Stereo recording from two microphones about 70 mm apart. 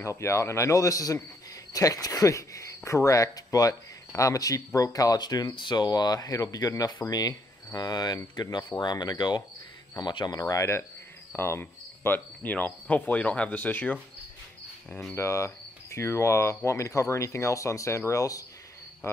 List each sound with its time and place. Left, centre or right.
0.0 s speech: left
11.3 s cricket: left
12.1 s speech: left
14.9 s speech: centre
15.1 s speech: left